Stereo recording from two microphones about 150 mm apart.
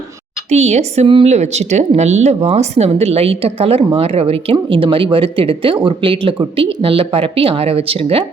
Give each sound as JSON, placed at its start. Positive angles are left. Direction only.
{"t": 0.5, "sound": "a woman's voice", "side_deg": -45}